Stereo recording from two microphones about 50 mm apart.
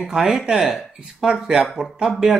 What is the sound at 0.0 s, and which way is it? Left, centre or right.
Speech, centre.